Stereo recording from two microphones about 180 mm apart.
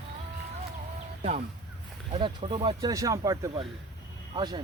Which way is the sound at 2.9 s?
20° right (ahead or behind).